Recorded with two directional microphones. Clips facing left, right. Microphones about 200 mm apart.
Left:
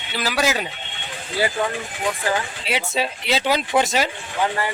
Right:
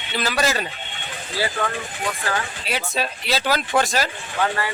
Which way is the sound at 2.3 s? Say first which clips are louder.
Left 3 dB; 25° left (ahead or behind).